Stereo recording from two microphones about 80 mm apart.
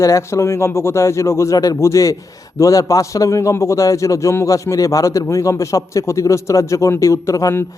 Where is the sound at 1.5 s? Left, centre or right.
Left.